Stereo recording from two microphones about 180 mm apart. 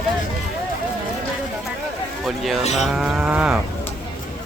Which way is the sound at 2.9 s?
Centre (ahead or behind).